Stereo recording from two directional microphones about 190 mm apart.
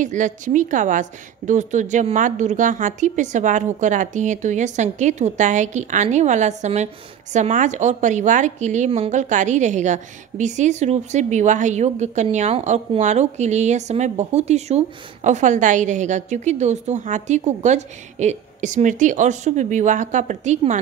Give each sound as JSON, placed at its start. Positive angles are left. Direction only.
{"t": 0.0, "sound": "a woman's voice", "side_deg": -40}